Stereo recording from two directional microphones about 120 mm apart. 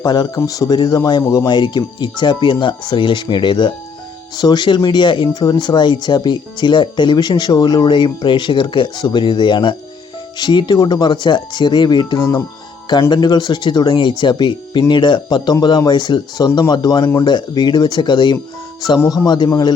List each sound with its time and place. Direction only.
0.0 s speech: 35° left (ahead or behind)